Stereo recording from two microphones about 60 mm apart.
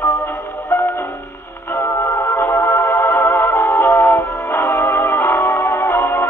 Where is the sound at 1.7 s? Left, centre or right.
Left.